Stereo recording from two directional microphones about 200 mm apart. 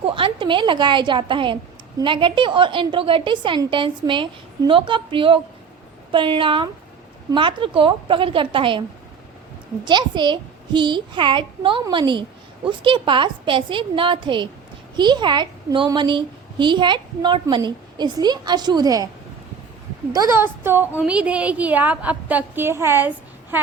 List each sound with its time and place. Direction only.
0.0 s a woman's voice: 25° right (ahead or behind)
9.8 s a woman's voice: 25° right (ahead or behind)
20.1 s a woman's voice: 15° right (ahead or behind)